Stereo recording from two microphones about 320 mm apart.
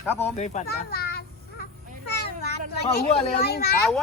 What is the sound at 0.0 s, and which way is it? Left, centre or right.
Speech, centre.